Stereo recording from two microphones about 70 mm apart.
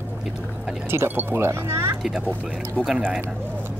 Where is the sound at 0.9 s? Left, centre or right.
Right.